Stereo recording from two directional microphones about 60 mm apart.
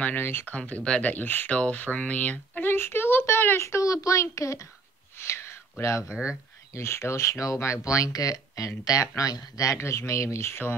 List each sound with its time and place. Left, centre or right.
0.0 s speech: left
0.5 s speech: left
1.6 s speech: left
2.7 s a sound: left
3.6 s speech: left
5.1 s a sound: left
6.7 s speech: left